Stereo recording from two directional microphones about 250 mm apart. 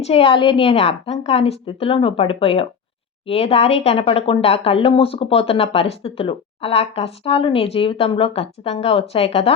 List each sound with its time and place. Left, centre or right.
0.0 s speech: left